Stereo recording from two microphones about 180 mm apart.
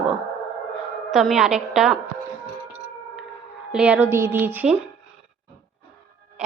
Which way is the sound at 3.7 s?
5° right (ahead or behind).